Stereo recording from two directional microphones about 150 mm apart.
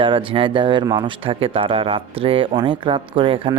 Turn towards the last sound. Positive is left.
turn(degrees=-35)  # may be behind; listen again after turning